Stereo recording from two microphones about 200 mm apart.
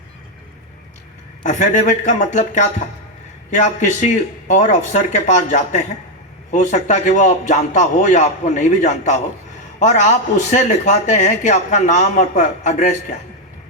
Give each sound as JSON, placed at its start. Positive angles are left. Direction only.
{"t": 1.5, "sound": "a man's voice", "side_deg": 35}